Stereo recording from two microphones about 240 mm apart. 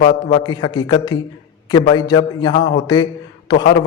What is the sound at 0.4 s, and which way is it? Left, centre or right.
A man's voice, centre.